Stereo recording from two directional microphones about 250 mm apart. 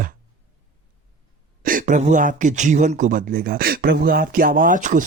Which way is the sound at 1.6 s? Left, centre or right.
Right.